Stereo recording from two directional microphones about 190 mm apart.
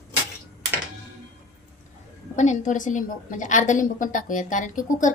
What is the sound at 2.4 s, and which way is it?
A woman's voice, 40° left (ahead or behind).